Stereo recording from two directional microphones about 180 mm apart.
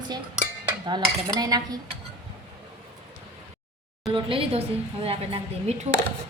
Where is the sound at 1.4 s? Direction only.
20° right (ahead or behind).